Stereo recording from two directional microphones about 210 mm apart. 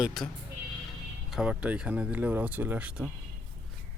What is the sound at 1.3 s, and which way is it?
Speech, 5° right (ahead or behind).